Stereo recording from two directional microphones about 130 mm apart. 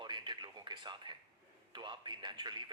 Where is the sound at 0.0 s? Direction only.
35° right (ahead or behind).